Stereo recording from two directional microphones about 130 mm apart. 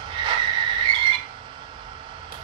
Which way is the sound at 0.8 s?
40° right (ahead or behind).